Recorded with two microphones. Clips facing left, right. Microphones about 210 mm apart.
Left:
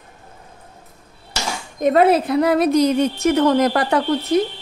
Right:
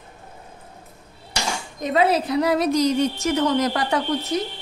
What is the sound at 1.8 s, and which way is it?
A woman's voice, 55° left (ahead or behind).